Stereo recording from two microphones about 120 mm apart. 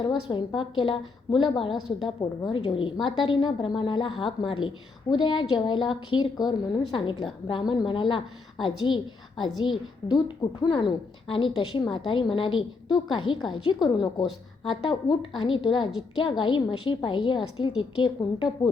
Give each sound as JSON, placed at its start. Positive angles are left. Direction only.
{"t": 0.3, "sound": "a woman's voice", "side_deg": 45}